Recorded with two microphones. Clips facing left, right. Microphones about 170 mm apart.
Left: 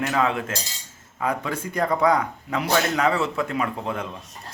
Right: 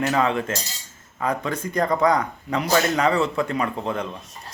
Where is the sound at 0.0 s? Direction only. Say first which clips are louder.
Right 2 dB; centre (ahead or behind).